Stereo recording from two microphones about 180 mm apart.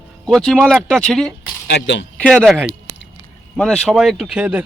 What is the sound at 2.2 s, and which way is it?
Speech, 5° left (ahead or behind).